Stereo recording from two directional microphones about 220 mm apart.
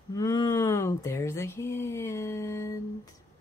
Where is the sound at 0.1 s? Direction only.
15° left (ahead or behind).